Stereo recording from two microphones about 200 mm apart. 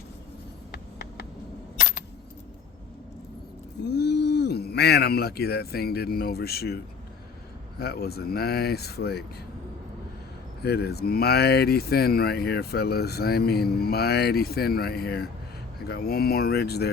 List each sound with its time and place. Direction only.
0.7 s a sound: 55° left (ahead or behind)
3.8 s speech: 55° left (ahead or behind)
7.8 s speech: 50° left (ahead or behind)
10.6 s speech: 55° left (ahead or behind)